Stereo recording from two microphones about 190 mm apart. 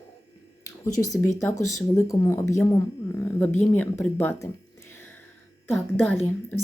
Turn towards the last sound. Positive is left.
turn(degrees=10)  # may be behind; listen again after turning